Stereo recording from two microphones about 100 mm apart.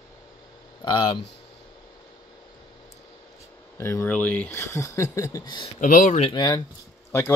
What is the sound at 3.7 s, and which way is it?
Speech, 25° left (ahead or behind).